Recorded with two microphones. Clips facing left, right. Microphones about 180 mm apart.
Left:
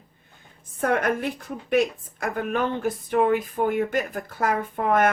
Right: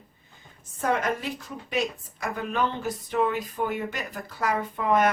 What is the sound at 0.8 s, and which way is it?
A woman's voice, 55° left (ahead or behind).